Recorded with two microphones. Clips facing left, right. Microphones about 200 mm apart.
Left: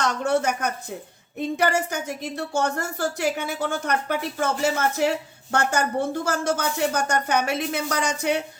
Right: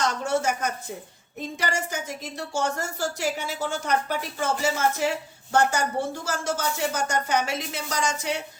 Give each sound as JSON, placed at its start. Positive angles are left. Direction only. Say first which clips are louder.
{"t": 0.3, "sound": "speech", "louder": "left 5 dB", "side_deg": 60}